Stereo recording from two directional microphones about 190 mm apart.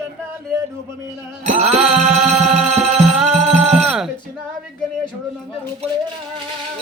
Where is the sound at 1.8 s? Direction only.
5° right (ahead or behind).